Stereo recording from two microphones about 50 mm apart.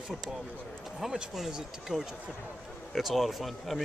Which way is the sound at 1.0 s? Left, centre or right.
Centre.